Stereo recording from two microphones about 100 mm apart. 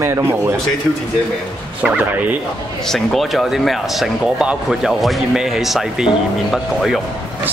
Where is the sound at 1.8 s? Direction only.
15° right (ahead or behind).